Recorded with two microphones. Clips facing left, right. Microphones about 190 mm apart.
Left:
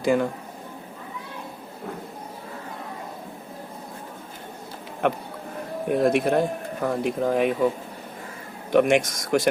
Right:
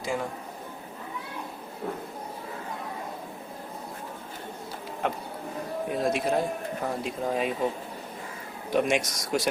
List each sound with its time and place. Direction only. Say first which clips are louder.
0.0 s speech: left 9 dB; 65° left (ahead or behind)
5.9 s speech: left 6 dB; 60° left (ahead or behind)
8.7 s speech: left 6 dB; 60° left (ahead or behind)